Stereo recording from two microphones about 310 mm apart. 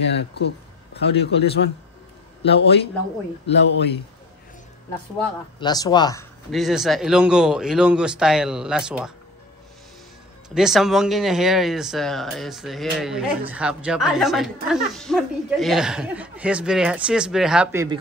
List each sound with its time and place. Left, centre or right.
0.1 s a man's voice: left
2.4 s a man's voice: left
5.6 s speech: centre
6.5 s speech: centre
10.5 s speech: centre